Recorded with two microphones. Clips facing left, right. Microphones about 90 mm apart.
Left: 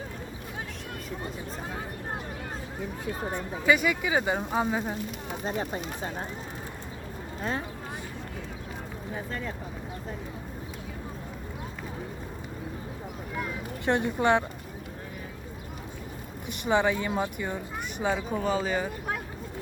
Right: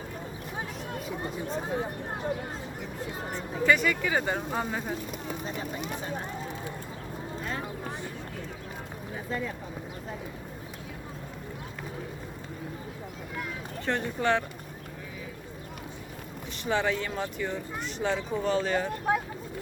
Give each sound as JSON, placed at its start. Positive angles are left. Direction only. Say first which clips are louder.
{"t": 3.3, "sound": "speech", "louder": "even", "side_deg": 5}
{"t": 13.8, "sound": "speech", "louder": "left 3 dB", "side_deg": 15}
{"t": 16.6, "sound": "speech", "louder": "left 3 dB", "side_deg": 15}